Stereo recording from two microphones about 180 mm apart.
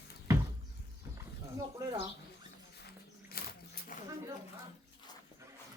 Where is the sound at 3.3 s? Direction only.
55° left (ahead or behind).